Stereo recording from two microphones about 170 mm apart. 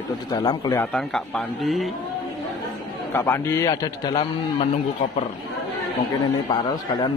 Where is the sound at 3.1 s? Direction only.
15° left (ahead or behind).